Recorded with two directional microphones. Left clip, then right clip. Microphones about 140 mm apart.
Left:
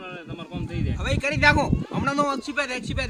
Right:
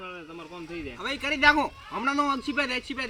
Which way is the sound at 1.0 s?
15° left (ahead or behind).